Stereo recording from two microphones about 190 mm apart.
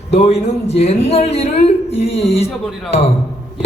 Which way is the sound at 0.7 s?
35° left (ahead or behind).